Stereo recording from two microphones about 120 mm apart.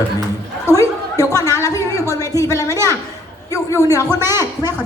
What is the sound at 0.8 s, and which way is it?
Chatter, 30° left (ahead or behind).